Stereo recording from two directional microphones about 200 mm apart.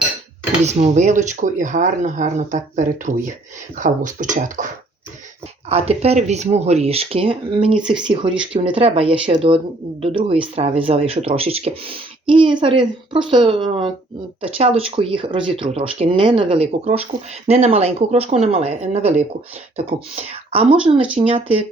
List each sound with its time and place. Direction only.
0.6 s speech: 35° right (ahead or behind)